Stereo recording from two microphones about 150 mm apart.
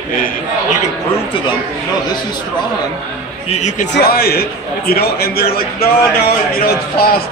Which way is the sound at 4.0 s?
90° left.